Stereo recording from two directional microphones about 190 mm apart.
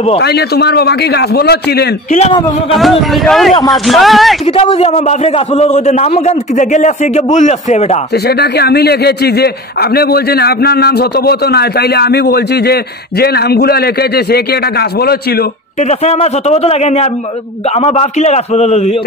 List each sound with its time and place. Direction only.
0.2 s a man's voice: 55° left (ahead or behind)
2.0 s a man's voice: 35° left (ahead or behind)
2.8 s speech: centre (ahead or behind)
4.5 s a man's voice: 30° left (ahead or behind)
8.1 s a man's voice: 60° left (ahead or behind)
15.8 s a man's voice: 35° left (ahead or behind)